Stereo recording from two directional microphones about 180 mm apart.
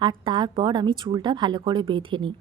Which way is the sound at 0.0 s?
25° right (ahead or behind).